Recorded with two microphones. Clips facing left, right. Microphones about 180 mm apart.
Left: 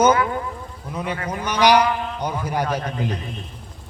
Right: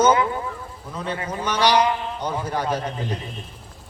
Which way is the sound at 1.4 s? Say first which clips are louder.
Left 2 dB; 10° left (ahead or behind).